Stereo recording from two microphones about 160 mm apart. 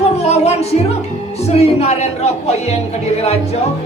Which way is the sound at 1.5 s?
40° left (ahead or behind).